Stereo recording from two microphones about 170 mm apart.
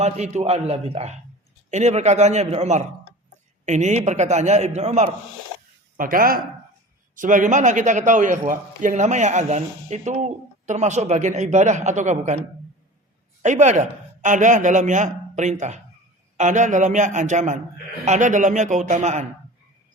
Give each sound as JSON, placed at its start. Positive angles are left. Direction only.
{"t": 0.0, "sound": "a man's voice", "side_deg": -40}
{"t": 6.0, "sound": "a man's voice", "side_deg": -55}
{"t": 13.4, "sound": "a man's voice", "side_deg": -45}